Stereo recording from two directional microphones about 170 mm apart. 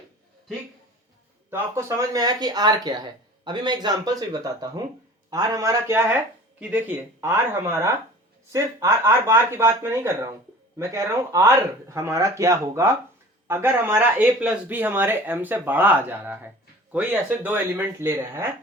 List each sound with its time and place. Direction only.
1.5 s speech: 15° right (ahead or behind)